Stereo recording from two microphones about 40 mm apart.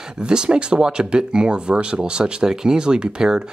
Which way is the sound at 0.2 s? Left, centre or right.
Right.